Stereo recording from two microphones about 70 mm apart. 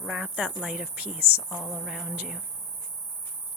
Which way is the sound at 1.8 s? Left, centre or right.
Centre.